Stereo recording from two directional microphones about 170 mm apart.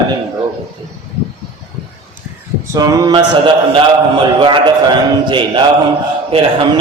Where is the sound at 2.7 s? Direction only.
20° right (ahead or behind).